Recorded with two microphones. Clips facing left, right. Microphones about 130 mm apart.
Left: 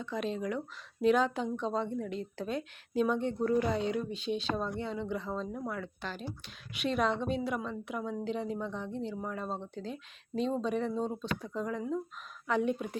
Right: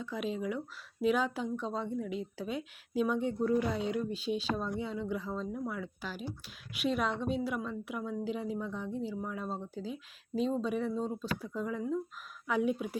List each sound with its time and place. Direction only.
0.0 s a woman's voice: 10° right (ahead or behind)